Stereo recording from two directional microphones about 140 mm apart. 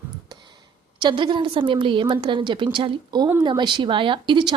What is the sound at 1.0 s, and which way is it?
A woman's voice, 35° right (ahead or behind).